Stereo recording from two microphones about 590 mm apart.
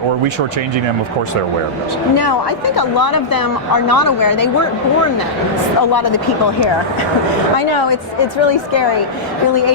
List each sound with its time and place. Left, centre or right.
2.1 s speech: left
5.9 s speech: left
7.5 s a woman's voice: left